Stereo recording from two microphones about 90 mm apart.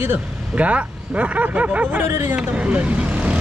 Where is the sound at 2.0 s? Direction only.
30° right (ahead or behind).